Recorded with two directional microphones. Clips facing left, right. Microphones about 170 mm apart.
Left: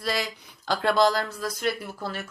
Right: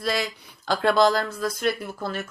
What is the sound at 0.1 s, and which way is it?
Speech, 15° left (ahead or behind).